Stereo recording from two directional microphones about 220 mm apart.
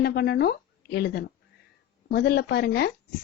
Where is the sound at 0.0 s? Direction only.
45° left (ahead or behind).